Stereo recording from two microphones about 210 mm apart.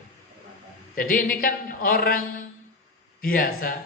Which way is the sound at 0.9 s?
40° left (ahead or behind).